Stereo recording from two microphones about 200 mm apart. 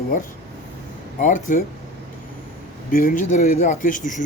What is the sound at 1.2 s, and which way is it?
Speech, 40° left (ahead or behind).